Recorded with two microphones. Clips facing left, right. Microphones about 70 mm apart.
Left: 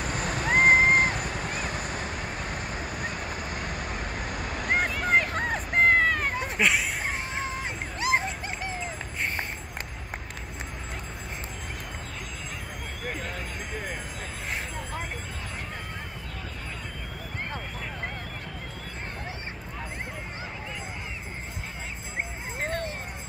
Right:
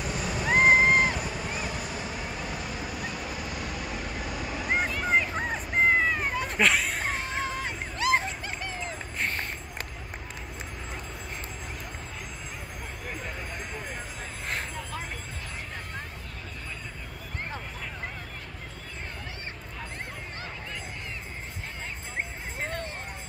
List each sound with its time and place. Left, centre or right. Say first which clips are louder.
0.0 s vehicle: left 1 dB; left
6.5 s a sound: right 1 dB; centre
7.3 s music: right 1 dB; left